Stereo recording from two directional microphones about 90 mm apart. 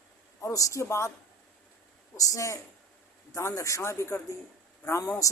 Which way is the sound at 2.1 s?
35° left (ahead or behind).